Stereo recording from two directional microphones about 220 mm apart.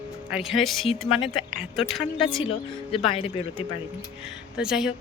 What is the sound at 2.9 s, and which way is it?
Speech, 25° left (ahead or behind).